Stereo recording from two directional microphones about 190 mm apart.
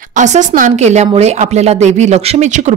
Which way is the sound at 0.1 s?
40° right (ahead or behind).